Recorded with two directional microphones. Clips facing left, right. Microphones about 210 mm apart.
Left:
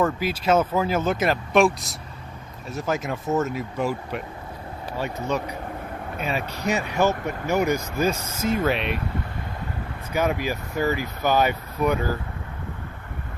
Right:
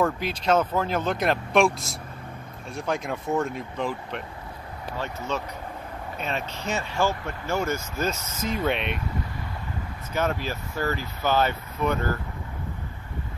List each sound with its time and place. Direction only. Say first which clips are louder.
0.0 s speech: left 2 dB; 5° left (ahead or behind)
10.1 s speech: left 3 dB; 10° left (ahead or behind)